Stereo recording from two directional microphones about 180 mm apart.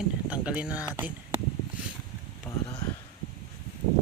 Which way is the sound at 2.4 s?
20° left (ahead or behind).